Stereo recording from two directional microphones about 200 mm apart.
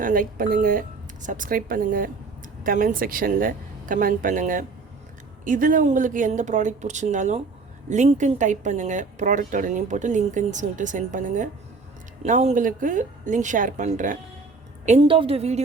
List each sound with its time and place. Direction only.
0.0 s speech: 45° right (ahead or behind)
14.8 s speech: 30° right (ahead or behind)